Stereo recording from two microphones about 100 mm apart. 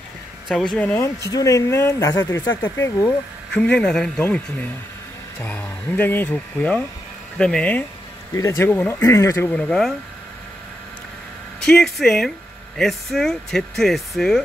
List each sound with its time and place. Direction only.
0.5 s speech: 5° left (ahead or behind)
1.3 s speech: 35° left (ahead or behind)
3.5 s speech: 10° left (ahead or behind)
8.4 s speech: 30° left (ahead or behind)
8.6 s speech: 20° left (ahead or behind)
9.0 s speech: 30° left (ahead or behind)
9.5 s speech: 10° left (ahead or behind)
11.6 s speech: 5° left (ahead or behind)